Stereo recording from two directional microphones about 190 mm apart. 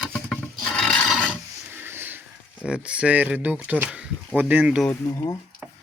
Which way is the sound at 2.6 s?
5° right (ahead or behind).